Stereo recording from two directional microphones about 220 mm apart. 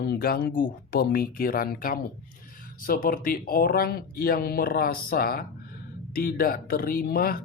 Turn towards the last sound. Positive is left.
turn(degrees=40)  # may be behind; listen again after turning